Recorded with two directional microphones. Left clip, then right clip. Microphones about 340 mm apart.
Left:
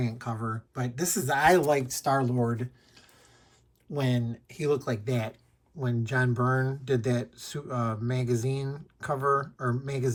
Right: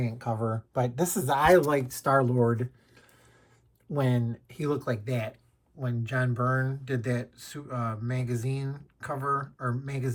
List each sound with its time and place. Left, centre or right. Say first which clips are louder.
0.0 s speech: right 3 dB; centre
0.7 s speech: right 5 dB; centre
1.2 s speech: right 1 dB; centre
4.1 s speech: even; centre